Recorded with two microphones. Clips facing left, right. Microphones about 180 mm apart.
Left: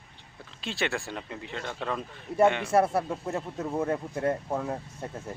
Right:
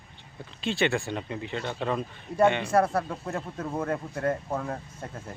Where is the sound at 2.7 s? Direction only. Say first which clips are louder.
Even; 25° left (ahead or behind).